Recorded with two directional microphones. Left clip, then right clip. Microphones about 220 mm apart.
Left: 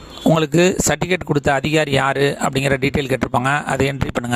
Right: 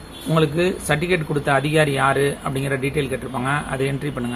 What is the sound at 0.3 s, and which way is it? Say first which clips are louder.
Speech: left 1 dB; 50° left (ahead or behind).